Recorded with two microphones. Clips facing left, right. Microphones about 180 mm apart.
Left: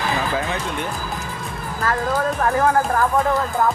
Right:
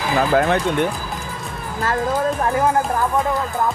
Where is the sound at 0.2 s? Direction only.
60° right (ahead or behind).